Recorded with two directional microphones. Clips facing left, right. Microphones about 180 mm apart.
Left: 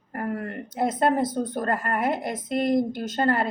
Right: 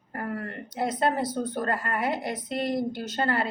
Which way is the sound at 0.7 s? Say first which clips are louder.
Left 4 dB; 50° left (ahead or behind).